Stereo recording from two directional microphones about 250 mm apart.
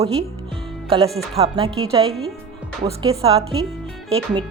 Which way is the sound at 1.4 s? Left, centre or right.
Right.